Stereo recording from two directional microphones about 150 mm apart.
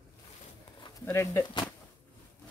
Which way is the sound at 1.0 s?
20° left (ahead or behind).